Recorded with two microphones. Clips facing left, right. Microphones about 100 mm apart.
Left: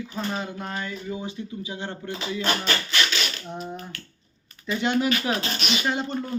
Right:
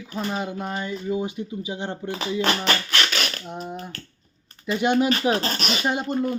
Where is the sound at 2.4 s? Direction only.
65° right (ahead or behind).